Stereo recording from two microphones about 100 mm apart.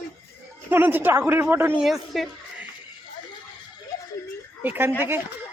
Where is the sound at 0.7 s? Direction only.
20° right (ahead or behind).